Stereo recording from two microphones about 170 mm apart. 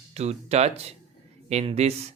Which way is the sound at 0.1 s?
40° right (ahead or behind).